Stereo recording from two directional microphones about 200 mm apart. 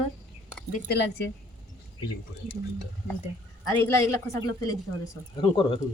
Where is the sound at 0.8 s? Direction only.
55° left (ahead or behind).